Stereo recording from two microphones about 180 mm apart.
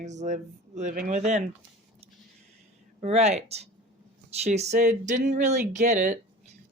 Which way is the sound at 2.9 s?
35° right (ahead or behind).